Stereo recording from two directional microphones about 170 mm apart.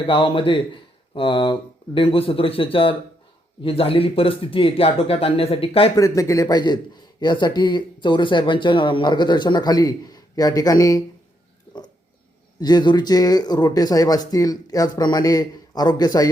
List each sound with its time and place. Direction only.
0.1 s speech: 30° left (ahead or behind)
6.0 s a man's voice: 20° left (ahead or behind)
12.5 s a man's voice: 25° left (ahead or behind)